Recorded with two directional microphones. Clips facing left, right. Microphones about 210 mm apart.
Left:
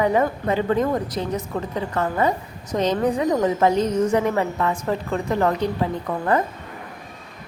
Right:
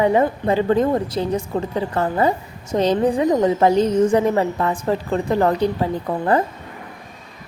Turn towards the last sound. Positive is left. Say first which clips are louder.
# right 3 dB
turn(degrees=-30)  # may be behind; listen again after turning